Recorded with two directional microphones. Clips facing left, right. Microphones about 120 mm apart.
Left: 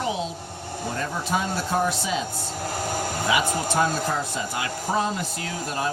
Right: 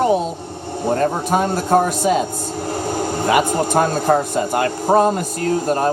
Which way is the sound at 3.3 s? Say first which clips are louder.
Right 8 dB; 55° right (ahead or behind).